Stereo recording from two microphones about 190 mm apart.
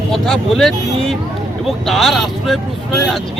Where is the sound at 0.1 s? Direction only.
Centre (ahead or behind).